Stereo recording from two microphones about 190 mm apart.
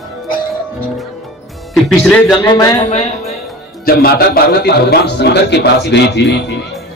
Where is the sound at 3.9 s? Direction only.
50° left (ahead or behind).